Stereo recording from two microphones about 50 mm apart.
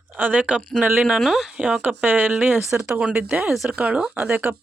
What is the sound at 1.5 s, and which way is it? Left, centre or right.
Speech, right.